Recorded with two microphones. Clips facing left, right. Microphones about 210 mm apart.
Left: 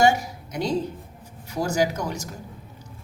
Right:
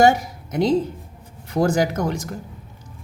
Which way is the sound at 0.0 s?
50° right (ahead or behind).